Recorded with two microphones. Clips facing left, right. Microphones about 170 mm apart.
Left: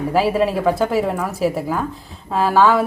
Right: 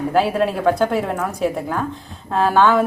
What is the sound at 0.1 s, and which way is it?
A woman's voice, centre (ahead or behind).